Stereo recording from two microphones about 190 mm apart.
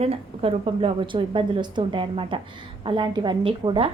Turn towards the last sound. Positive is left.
turn(degrees=-30)  # may be behind; listen again after turning